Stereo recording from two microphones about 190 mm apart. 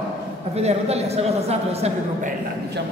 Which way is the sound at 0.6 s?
35° right (ahead or behind).